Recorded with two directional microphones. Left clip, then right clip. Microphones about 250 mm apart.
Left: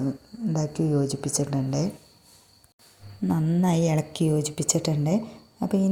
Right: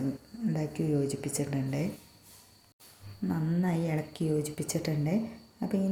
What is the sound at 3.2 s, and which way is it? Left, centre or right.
A woman's voice, left.